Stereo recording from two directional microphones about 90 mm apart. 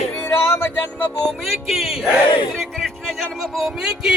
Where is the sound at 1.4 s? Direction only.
Centre (ahead or behind).